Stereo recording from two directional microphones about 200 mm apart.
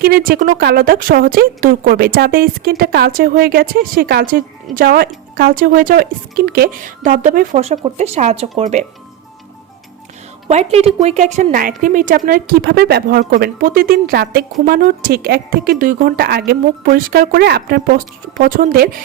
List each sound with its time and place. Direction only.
0.0 s a woman's voice: 45° right (ahead or behind)
10.5 s a woman's voice: 30° right (ahead or behind)